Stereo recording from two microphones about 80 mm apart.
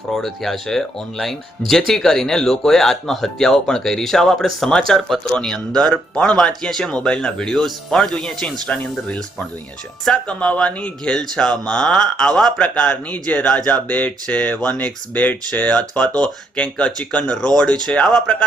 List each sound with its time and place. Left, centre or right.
0.1 s speech: centre